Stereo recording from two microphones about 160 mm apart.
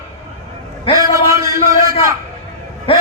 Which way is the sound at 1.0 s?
20° right (ahead or behind).